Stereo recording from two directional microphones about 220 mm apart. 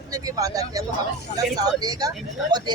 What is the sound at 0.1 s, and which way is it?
Speech, 15° right (ahead or behind).